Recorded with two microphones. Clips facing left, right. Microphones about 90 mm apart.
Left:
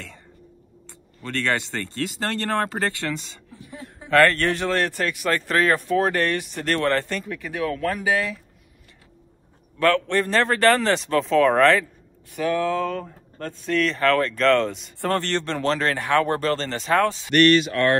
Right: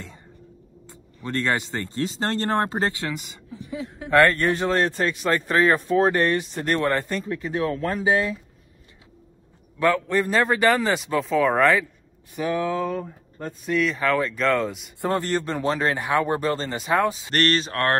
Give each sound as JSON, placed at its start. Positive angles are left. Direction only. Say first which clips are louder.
{"t": 1.2, "sound": "a man's voice", "louder": "even", "side_deg": -15}
{"t": 9.8, "sound": "speech", "louder": "left 1 dB", "side_deg": -10}
{"t": 12.3, "sound": "speech", "louder": "left 2 dB", "side_deg": -20}
{"t": 17.3, "sound": "speech", "louder": "left 6 dB", "side_deg": -35}